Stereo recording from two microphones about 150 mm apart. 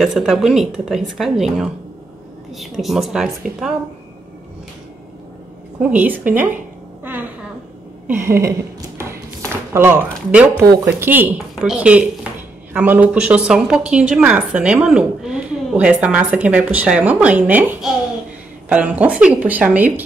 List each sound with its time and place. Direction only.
0.0 s a woman's voice: 5° right (ahead or behind)
5.8 s speech: 10° right (ahead or behind)
8.1 s a sound: 15° right (ahead or behind)
11.0 s speech: 10° right (ahead or behind)